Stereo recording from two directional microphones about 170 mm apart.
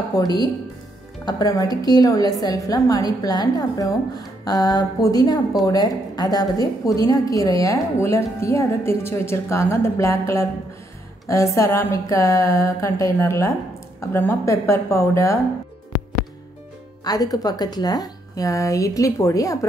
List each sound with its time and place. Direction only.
0.2 s a woman's voice: 25° left (ahead or behind)
17.0 s a woman's voice: 20° left (ahead or behind)